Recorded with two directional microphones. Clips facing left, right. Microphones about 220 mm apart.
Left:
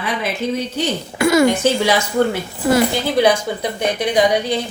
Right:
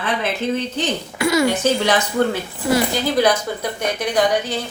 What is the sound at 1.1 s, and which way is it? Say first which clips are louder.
Speech: left 4 dB; 50° left (ahead or behind).